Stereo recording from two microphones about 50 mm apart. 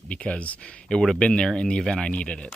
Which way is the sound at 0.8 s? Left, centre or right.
Centre.